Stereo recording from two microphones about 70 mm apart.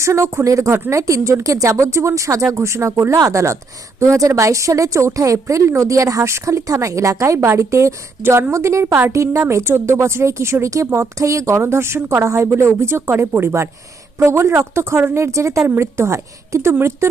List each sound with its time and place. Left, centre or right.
0.0 s a woman's voice: right